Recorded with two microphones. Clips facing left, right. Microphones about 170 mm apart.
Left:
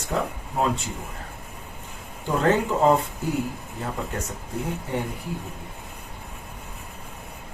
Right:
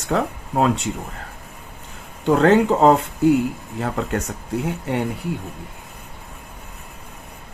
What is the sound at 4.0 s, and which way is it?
Speech, 90° right.